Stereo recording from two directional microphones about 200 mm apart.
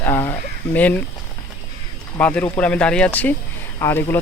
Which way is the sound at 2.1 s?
10° left (ahead or behind).